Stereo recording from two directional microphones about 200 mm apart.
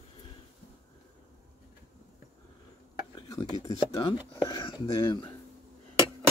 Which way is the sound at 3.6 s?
20° left (ahead or behind).